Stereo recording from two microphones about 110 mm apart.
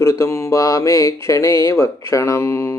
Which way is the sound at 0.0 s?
25° left (ahead or behind).